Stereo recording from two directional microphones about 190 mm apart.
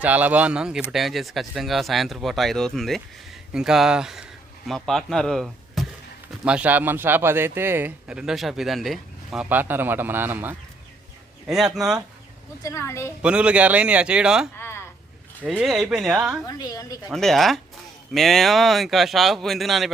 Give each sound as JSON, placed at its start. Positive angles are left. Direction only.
{"t": 0.0, "sound": "a man's voice", "side_deg": -10}
{"t": 12.6, "sound": "a woman's voice", "side_deg": 15}
{"t": 13.2, "sound": "speech", "side_deg": -5}
{"t": 14.6, "sound": "a sound", "side_deg": 10}
{"t": 15.5, "sound": "speech", "side_deg": 0}
{"t": 16.5, "sound": "a woman's voice", "side_deg": 20}
{"t": 17.1, "sound": "speech", "side_deg": 0}